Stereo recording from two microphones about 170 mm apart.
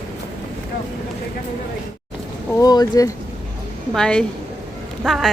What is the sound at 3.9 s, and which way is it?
A woman's voice, 5° left (ahead or behind).